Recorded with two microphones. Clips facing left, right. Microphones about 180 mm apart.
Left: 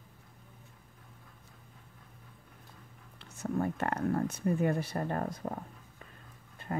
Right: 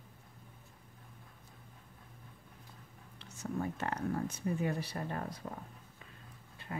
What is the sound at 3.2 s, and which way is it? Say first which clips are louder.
Speech: left 5 dB; 55° left (ahead or behind).